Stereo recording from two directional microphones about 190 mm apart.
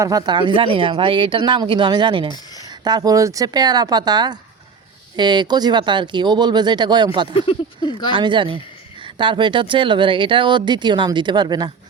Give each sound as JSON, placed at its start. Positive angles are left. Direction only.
{"t": 0.0, "sound": "speech", "side_deg": -20}
{"t": 7.3, "sound": "a sound", "side_deg": 25}
{"t": 8.1, "sound": "speech", "side_deg": -25}